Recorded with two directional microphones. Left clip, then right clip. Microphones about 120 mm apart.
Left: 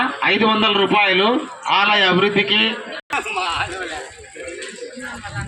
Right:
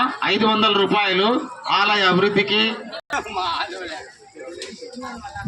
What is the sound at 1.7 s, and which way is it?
Speech, 40° right (ahead or behind).